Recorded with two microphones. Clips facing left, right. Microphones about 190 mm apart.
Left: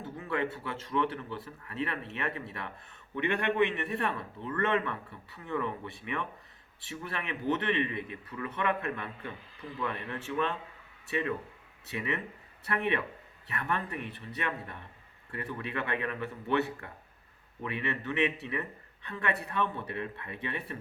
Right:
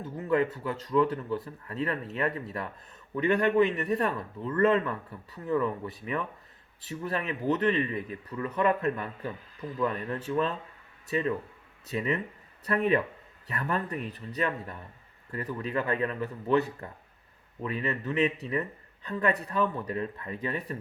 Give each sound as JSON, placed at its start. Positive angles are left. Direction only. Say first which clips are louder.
{"t": 0.2, "sound": "a man's voice", "louder": "right 7 dB", "side_deg": -40}